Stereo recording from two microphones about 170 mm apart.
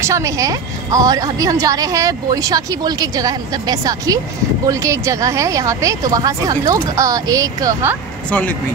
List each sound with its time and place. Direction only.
0.0 s a woman's voice: 20° right (ahead or behind)
8.3 s speech: 10° left (ahead or behind)